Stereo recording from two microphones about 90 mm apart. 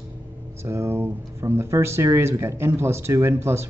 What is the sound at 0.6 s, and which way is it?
Speech, 30° right (ahead or behind).